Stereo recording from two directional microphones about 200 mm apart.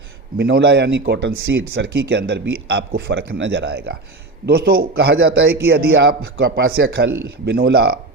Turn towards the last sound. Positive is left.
turn(degrees=-50)  # may be behind; listen again after turning